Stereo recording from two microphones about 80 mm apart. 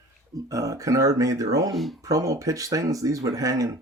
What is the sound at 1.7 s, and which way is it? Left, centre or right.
Speech, centre.